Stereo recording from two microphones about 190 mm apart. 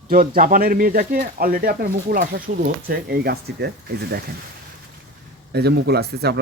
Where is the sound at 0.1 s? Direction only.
45° right (ahead or behind).